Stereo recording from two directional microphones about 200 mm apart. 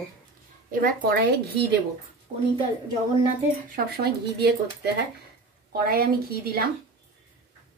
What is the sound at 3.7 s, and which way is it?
Speech, 55° right (ahead or behind).